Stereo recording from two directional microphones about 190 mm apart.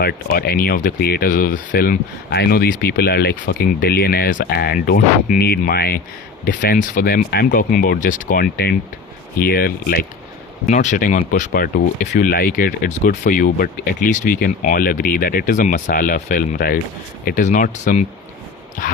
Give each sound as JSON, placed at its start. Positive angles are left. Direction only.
{"t": 0.0, "sound": "speech", "side_deg": 55}
{"t": 10.7, "sound": "speech", "side_deg": 40}